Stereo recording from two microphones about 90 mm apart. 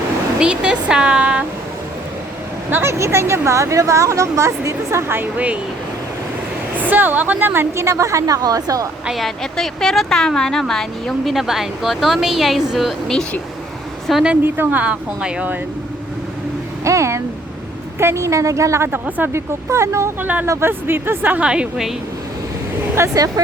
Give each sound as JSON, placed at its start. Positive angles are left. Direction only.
{"t": 0.3, "sound": "speech", "side_deg": -10}
{"t": 2.6, "sound": "speech", "side_deg": -25}
{"t": 6.7, "sound": "speech", "side_deg": -20}
{"t": 9.0, "sound": "a woman's voice", "side_deg": 0}
{"t": 14.4, "sound": "speech", "side_deg": -25}
{"t": 16.8, "sound": "speech", "side_deg": -35}
{"t": 18.9, "sound": "speech", "side_deg": -20}
{"t": 19.3, "sound": "speech", "side_deg": -30}
{"t": 20.2, "sound": "speech", "side_deg": -20}
{"t": 23.0, "sound": "speech", "side_deg": -30}